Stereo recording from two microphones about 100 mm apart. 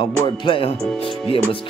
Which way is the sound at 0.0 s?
60° left (ahead or behind).